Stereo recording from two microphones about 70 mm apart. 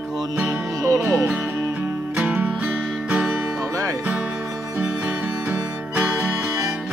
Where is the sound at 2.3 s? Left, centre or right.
Right.